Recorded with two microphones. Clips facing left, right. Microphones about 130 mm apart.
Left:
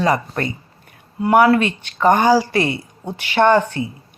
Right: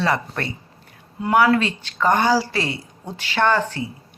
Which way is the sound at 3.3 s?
20° left (ahead or behind).